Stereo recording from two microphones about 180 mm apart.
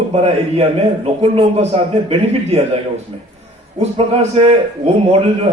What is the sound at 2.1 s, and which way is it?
Speech, 35° right (ahead or behind).